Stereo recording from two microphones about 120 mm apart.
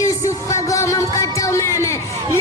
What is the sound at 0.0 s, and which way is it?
Music, 25° left (ahead or behind).